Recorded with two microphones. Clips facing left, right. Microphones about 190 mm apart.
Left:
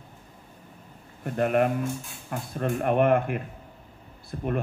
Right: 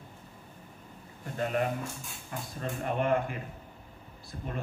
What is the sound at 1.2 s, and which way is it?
Speech, 60° left (ahead or behind).